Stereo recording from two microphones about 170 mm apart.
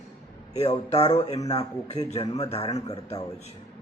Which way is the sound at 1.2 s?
20° left (ahead or behind).